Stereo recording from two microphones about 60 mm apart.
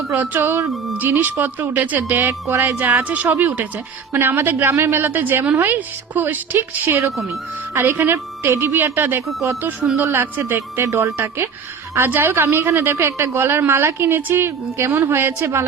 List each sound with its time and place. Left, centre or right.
0.1 s a woman's voice: right
2.7 s a woman's voice: right
4.1 s a woman's voice: right
5.0 s a woman's voice: right
7.3 s a woman's voice: right
10.8 s speech: right
11.9 s a woman's voice: right